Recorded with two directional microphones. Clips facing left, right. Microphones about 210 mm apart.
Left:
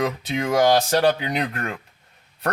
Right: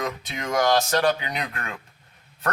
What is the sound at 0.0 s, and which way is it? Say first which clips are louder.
Speech: left 6 dB; 30° left (ahead or behind).